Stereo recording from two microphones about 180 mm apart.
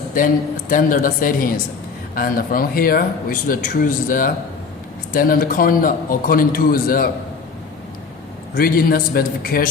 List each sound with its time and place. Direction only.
0.7 s speech: 50° left (ahead or behind)
8.5 s speech: 55° left (ahead or behind)